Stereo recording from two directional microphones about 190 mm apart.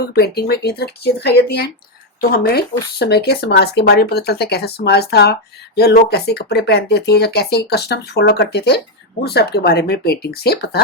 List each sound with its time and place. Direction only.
0.1 s speech: 55° left (ahead or behind)